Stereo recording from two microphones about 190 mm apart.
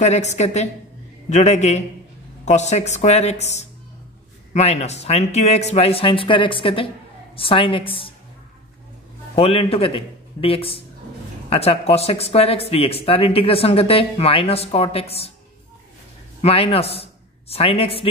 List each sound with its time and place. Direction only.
0.0 s a woman's voice: 35° left (ahead or behind)
9.3 s speech: 30° left (ahead or behind)
16.3 s a man's voice: 30° left (ahead or behind)